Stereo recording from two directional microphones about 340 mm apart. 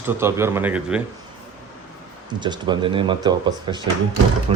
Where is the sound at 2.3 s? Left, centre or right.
Centre.